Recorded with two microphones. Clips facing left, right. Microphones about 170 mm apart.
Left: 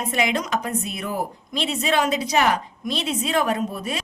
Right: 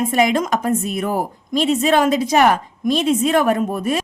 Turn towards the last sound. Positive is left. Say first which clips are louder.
# right 7 dB
turn(degrees=-50)  # may be behind; listen again after turning